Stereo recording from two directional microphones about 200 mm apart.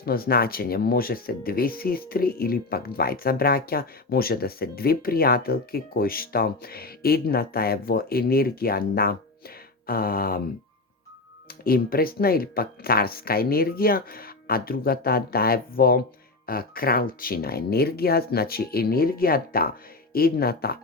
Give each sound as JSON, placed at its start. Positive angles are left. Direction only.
{"t": 0.0, "sound": "speech", "side_deg": 50}
{"t": 11.6, "sound": "speech", "side_deg": 45}